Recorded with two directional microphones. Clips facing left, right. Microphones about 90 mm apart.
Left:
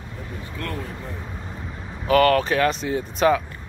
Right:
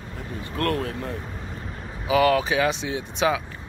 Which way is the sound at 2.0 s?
5° right (ahead or behind).